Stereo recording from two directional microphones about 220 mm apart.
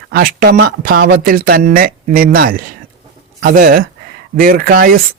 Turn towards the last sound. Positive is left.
turn(degrees=-40)  # may be behind; listen again after turning